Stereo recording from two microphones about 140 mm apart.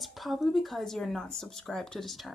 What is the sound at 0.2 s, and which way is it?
Speech, centre (ahead or behind).